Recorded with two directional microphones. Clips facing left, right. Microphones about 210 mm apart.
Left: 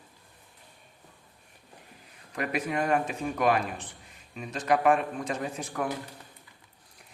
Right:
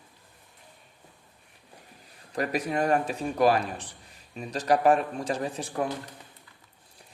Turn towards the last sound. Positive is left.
turn(degrees=-30)  # may be behind; listen again after turning